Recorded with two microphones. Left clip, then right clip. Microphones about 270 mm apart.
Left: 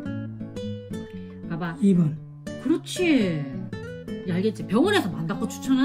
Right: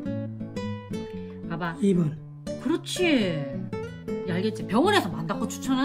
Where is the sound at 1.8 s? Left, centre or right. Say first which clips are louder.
Left 2 dB; centre.